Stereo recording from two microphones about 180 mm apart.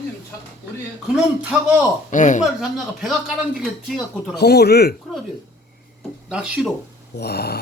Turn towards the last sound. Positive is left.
turn(degrees=60)  # may be behind; listen again after turning